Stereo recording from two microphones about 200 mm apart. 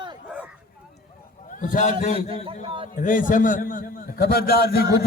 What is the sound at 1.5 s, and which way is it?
Speech, 40° left (ahead or behind).